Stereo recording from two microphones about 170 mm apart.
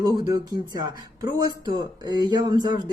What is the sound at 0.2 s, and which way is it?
Speech, 25° right (ahead or behind).